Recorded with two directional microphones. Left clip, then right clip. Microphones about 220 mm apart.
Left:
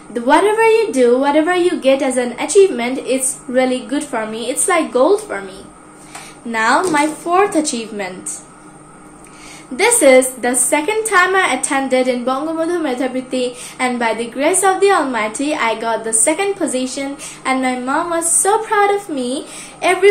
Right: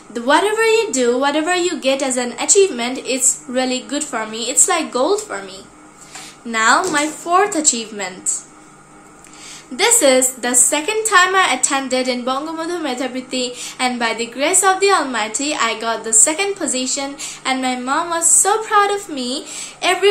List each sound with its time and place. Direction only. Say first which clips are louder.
0.1 s a woman's voice: left 2 dB; 15° right (ahead or behind)
6.5 s a woman's voice: even; 15° right (ahead or behind)
9.8 s a woman's voice: left 3 dB; 15° right (ahead or behind)